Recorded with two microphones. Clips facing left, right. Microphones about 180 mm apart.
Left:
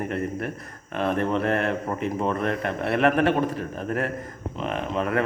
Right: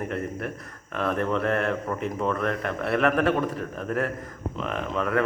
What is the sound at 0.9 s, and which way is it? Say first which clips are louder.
A man's voice: left 2 dB; 30° left (ahead or behind).